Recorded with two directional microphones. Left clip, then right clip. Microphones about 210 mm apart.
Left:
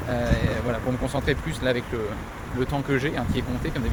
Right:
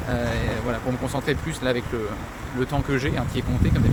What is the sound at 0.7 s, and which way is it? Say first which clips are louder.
Speech: even; 5° right (ahead or behind).